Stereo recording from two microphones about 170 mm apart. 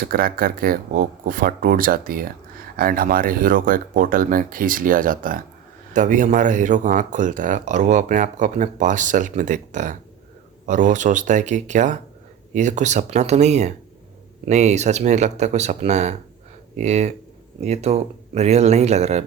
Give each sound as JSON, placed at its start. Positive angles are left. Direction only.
{"t": 0.0, "sound": "speech", "side_deg": -60}